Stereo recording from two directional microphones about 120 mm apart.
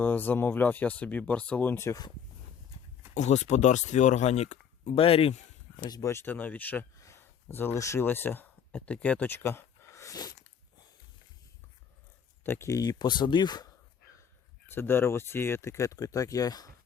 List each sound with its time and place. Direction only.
0.0 s speech: 15° left (ahead or behind)
3.2 s speech: 75° left (ahead or behind)
4.9 s speech: 55° left (ahead or behind)
6.0 s speech: 20° left (ahead or behind)
7.0 s a sound: 20° left (ahead or behind)
12.4 s speech: 20° left (ahead or behind); by 13.7 s 35° left (ahead or behind)
14.8 s speech: 20° left (ahead or behind)